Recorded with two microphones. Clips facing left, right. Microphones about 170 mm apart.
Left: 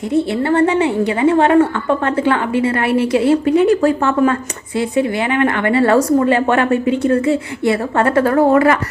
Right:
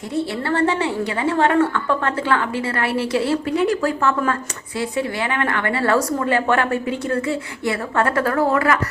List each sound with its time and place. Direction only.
0.1 s a woman's voice: 20° left (ahead or behind)